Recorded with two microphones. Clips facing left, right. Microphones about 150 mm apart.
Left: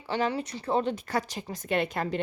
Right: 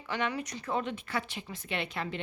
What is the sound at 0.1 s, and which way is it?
Speech, 30° left (ahead or behind).